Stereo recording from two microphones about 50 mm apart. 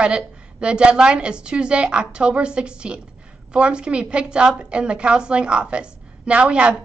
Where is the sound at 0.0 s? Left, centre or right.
Right.